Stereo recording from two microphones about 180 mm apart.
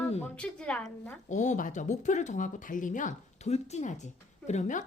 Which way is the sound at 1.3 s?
40° left (ahead or behind).